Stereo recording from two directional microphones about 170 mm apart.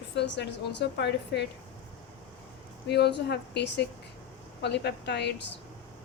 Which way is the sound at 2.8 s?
75° left (ahead or behind).